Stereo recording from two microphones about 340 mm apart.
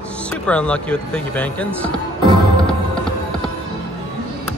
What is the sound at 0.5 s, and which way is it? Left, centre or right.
Speech, centre.